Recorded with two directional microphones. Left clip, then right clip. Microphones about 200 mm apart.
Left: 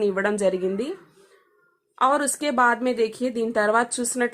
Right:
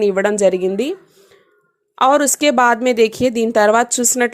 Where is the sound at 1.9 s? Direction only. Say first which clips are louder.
Right 8 dB; 30° right (ahead or behind).